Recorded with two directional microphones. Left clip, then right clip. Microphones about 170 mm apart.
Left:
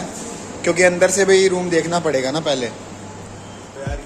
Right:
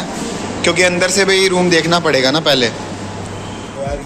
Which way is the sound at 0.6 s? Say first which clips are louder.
Right 1 dB; 30° left (ahead or behind).